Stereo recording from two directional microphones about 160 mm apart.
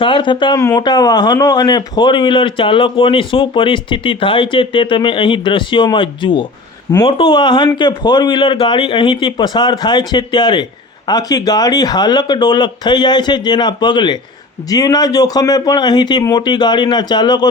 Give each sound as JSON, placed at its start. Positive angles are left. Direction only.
{"t": 0.0, "sound": "speech", "side_deg": 30}